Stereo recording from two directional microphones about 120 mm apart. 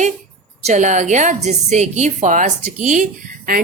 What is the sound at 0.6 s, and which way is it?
Speech, 85° right.